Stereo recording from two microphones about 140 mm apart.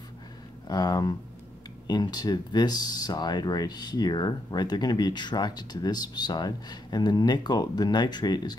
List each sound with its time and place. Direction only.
0.7 s speech: 30° left (ahead or behind)